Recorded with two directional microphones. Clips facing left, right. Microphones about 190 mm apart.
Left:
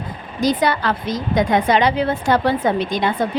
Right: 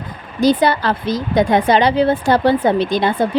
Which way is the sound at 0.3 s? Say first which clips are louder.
Right 4 dB; 30° right (ahead or behind).